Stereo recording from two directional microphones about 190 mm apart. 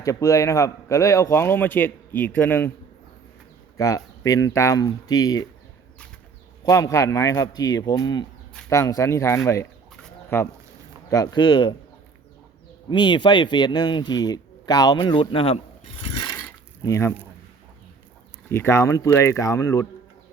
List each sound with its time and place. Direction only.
0.0 s speech: 15° left (ahead or behind)
3.8 s speech: 15° left (ahead or behind)
6.7 s speech: 15° left (ahead or behind)
12.9 s speech: 25° left (ahead or behind)
16.1 s a sound: 15° left (ahead or behind)
18.4 s speech: 15° left (ahead or behind)